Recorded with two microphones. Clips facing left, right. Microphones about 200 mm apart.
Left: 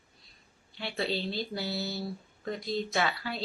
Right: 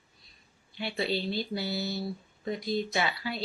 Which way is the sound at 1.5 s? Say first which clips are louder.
Right 2 dB; centre (ahead or behind).